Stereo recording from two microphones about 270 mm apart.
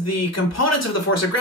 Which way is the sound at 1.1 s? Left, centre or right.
Left.